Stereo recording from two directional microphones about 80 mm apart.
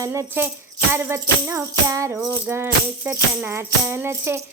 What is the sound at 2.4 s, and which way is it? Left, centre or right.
Music, right.